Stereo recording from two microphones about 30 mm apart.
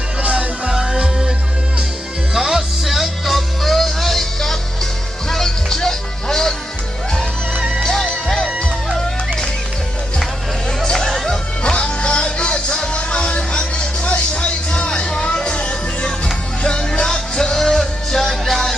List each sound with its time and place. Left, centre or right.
0.2 s music: right
0.7 s music: centre
2.3 s music: centre
7.8 s music: centre
11.6 s music: left
17.5 s music: centre